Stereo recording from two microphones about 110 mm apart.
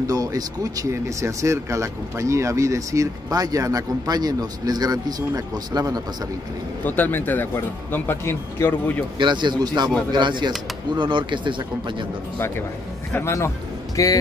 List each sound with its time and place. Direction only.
0.0 s speech: 35° right (ahead or behind)
6.8 s speech: 15° left (ahead or behind)
9.2 s speech: 45° right (ahead or behind)
13.1 s speech: 25° left (ahead or behind)